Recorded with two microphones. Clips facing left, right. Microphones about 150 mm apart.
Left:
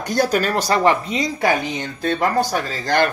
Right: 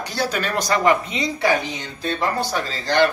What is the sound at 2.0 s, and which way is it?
Speech, 45° left (ahead or behind).